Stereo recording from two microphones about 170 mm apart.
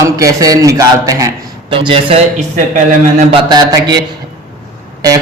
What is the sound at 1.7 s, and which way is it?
Speech, 30° right (ahead or behind).